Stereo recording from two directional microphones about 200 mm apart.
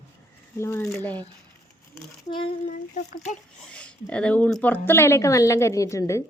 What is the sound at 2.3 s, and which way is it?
Speech, 25° left (ahead or behind).